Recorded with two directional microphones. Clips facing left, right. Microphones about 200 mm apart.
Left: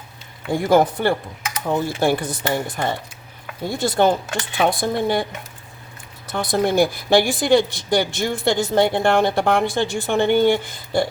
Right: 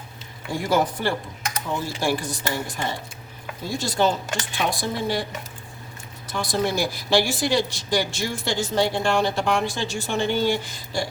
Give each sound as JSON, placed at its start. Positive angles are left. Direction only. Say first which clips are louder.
{"t": 0.5, "sound": "speech", "louder": "left 6 dB", "side_deg": 55}
{"t": 6.2, "sound": "speech", "louder": "left 4 dB", "side_deg": 60}